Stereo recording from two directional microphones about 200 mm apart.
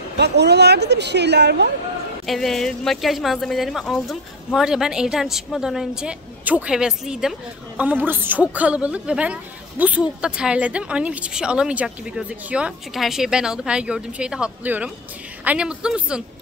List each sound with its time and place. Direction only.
0.2 s a woman's voice: 55° right (ahead or behind)
2.2 s a woman's voice: centre (ahead or behind)